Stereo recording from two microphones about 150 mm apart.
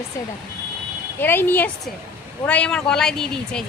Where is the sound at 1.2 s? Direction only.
15° left (ahead or behind).